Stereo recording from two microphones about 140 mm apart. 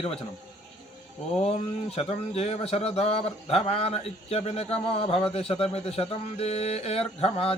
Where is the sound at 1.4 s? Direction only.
45° left (ahead or behind).